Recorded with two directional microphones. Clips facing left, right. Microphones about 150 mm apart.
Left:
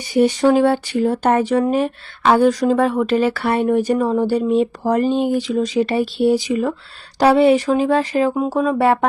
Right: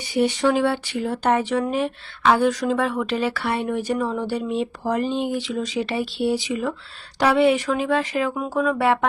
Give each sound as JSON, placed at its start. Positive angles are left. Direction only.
{"t": 0.1, "sound": "speech", "side_deg": 45}